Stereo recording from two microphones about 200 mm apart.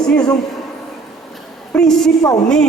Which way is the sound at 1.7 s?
5° left (ahead or behind).